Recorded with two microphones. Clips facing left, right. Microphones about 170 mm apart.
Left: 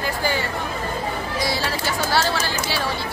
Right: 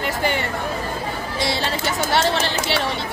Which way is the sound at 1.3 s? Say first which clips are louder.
Right 2 dB; 25° right (ahead or behind).